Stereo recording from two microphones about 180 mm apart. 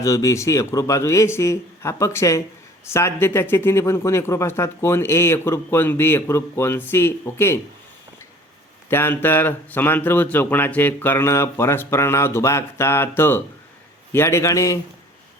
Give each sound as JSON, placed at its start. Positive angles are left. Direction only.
{"t": 0.0, "sound": "speech", "side_deg": 20}
{"t": 8.9, "sound": "speech", "side_deg": 10}